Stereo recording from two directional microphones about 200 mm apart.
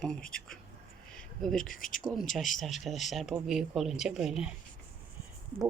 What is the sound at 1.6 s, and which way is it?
Speech, 40° left (ahead or behind).